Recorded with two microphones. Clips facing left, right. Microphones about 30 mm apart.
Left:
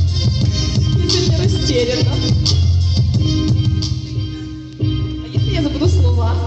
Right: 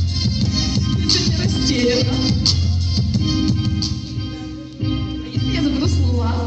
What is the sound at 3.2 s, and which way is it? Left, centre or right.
Music, right.